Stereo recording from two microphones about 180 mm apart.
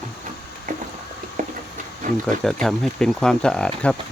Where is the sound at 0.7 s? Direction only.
45° right (ahead or behind).